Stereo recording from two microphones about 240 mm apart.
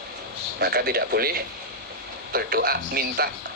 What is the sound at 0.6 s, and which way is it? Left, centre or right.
Speech, right.